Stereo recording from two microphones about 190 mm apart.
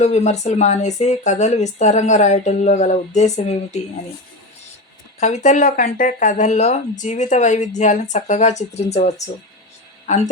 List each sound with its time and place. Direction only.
0.0 s speech: 35° left (ahead or behind)
5.2 s speech: 35° left (ahead or behind)